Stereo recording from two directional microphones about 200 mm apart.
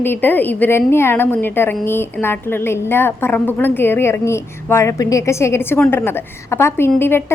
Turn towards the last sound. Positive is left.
turn(degrees=10)  # may be behind; listen again after turning